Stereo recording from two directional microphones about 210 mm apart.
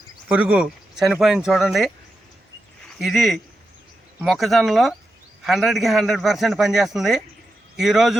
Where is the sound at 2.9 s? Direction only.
Centre (ahead or behind).